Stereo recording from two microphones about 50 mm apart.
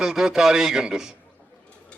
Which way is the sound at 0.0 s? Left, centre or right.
Centre.